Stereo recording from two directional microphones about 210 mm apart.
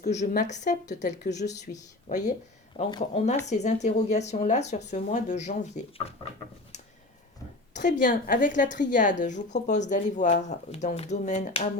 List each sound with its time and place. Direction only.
0.0 s a woman's voice: 35° left (ahead or behind)
7.7 s a woman's voice: 35° left (ahead or behind)